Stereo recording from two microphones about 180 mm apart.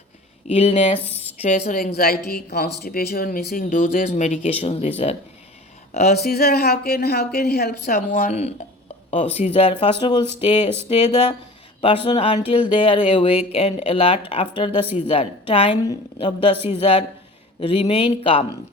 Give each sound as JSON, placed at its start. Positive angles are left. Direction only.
{"t": 0.4, "sound": "a woman's voice", "side_deg": 35}
{"t": 1.0, "sound": "a sound", "side_deg": 35}
{"t": 1.7, "sound": "speech", "side_deg": 55}
{"t": 4.1, "sound": "a woman's voice", "side_deg": 40}
{"t": 5.9, "sound": "speech", "side_deg": 40}
{"t": 6.2, "sound": "speech", "side_deg": 60}
{"t": 8.2, "sound": "a woman's voice", "side_deg": 40}